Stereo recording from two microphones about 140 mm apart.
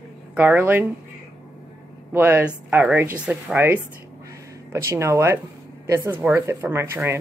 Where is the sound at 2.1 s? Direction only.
15° right (ahead or behind).